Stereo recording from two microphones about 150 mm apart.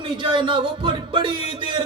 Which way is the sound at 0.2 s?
30° right (ahead or behind).